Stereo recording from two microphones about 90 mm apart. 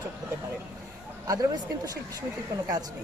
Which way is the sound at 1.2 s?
40° right (ahead or behind).